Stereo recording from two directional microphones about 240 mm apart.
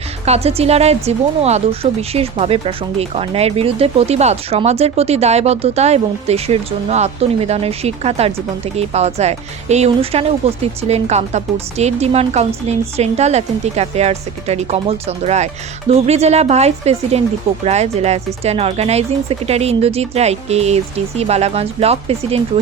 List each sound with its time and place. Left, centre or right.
0.3 s a woman's voice: right